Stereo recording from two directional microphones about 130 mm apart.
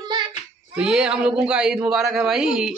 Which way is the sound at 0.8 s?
5° right (ahead or behind).